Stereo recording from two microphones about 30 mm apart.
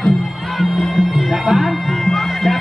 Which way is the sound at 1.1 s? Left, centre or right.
Centre.